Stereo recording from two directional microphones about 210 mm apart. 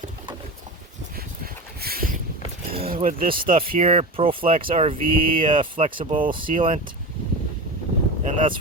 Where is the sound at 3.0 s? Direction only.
40° right (ahead or behind).